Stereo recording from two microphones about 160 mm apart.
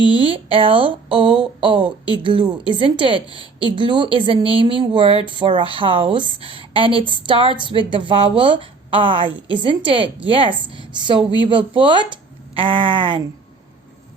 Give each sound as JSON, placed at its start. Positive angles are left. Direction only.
{"t": 0.0, "sound": "speech", "side_deg": 30}
{"t": 0.3, "sound": "a woman's voice", "side_deg": -35}